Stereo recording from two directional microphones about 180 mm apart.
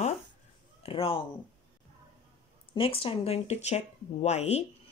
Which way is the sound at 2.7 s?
30° left (ahead or behind).